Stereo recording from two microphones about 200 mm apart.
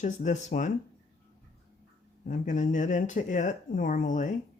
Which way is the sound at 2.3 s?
40° left (ahead or behind).